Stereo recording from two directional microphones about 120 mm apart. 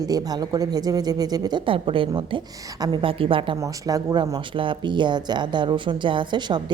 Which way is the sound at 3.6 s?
30° right (ahead or behind).